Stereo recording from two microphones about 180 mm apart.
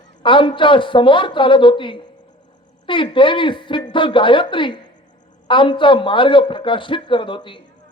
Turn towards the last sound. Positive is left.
turn(degrees=25)  # may be behind; listen again after turning